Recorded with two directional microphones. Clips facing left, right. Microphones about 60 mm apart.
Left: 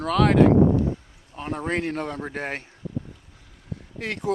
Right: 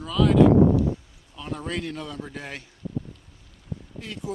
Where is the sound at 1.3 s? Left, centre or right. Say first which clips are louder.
Left 4 dB; left.